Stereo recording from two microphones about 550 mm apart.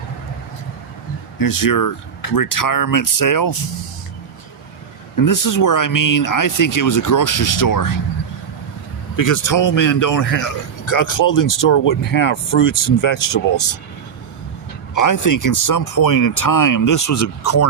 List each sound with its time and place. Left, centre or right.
1.4 s speech: left
5.1 s speech: left
9.1 s speech: left
14.9 s speech: left